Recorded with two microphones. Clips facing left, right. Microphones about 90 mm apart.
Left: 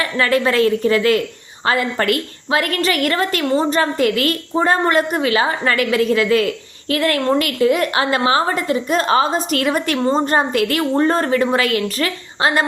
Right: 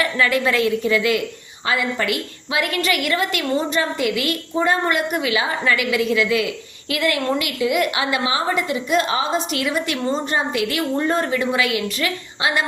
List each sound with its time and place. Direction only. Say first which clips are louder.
0.0 s a woman's voice: left 2 dB; 35° left (ahead or behind)